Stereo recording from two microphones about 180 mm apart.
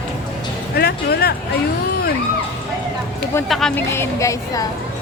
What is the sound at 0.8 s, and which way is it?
Speech, 60° left (ahead or behind).